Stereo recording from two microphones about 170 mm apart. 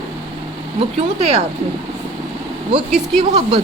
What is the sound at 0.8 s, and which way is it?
Speech, 40° right (ahead or behind).